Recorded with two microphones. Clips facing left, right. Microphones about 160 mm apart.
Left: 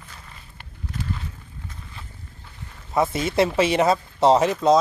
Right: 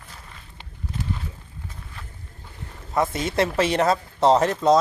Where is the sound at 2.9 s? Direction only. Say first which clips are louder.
Left 2 dB; 5° left (ahead or behind).